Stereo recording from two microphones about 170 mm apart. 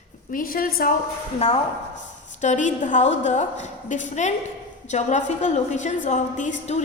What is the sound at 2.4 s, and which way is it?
A woman's voice, 45° left (ahead or behind).